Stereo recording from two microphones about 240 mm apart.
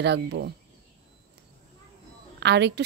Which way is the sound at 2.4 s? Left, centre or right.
Right.